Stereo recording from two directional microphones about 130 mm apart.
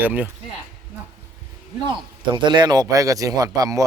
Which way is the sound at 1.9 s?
35° right (ahead or behind).